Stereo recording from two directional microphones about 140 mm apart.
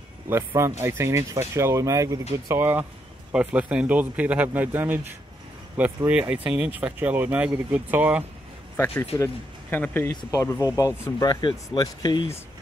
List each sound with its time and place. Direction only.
0.6 s speech: 20° right (ahead or behind)
6.0 s speech: 10° right (ahead or behind)
8.7 s speech: 15° left (ahead or behind); by 12.3 s 30° left (ahead or behind)